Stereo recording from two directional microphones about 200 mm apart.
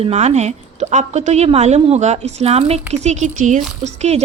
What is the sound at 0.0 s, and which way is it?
A woman's voice, 35° right (ahead or behind).